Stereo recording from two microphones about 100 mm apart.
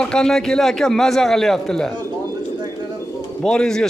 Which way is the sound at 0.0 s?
5° left (ahead or behind).